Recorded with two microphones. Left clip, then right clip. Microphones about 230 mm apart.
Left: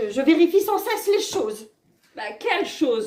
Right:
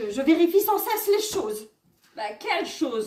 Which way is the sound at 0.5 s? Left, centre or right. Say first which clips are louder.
Left 1 dB; right.